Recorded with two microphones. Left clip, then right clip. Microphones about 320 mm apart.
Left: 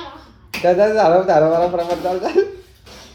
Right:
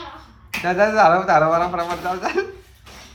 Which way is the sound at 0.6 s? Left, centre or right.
Centre.